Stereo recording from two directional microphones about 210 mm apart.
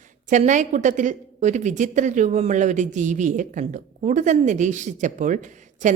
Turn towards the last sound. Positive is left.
turn(degrees=-35)  # may be behind; listen again after turning